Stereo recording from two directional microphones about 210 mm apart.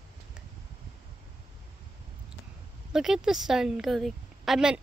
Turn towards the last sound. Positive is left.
turn(degrees=0)  # may be behind; listen again after turning